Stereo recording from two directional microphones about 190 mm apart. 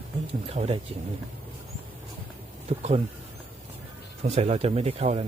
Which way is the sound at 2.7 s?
35° right (ahead or behind).